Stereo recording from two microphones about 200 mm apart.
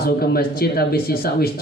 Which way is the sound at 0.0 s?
50° left (ahead or behind).